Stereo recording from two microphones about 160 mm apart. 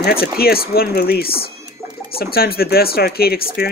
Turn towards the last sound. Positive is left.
turn(degrees=70)  # may be behind; listen again after turning